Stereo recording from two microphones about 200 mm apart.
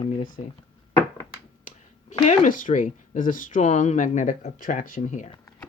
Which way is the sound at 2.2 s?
40° left (ahead or behind).